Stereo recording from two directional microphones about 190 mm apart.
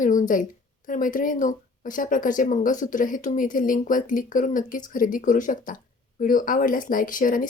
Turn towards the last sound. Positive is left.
turn(degrees=45)  # may be behind; listen again after turning